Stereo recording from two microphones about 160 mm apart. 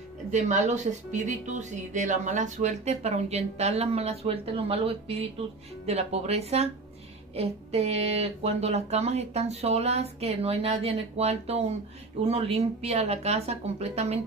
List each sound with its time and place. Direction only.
0.3 s speech: 50° right (ahead or behind)